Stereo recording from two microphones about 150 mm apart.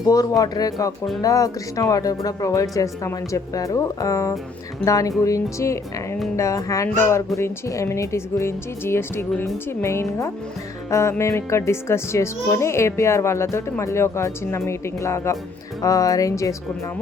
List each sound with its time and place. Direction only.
0.1 s a child's voice: 25° left (ahead or behind)
10.8 s music: 20° left (ahead or behind)
11.2 s a child's voice: 20° left (ahead or behind)